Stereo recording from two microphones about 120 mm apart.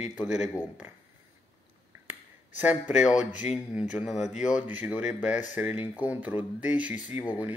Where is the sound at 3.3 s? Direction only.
85° left.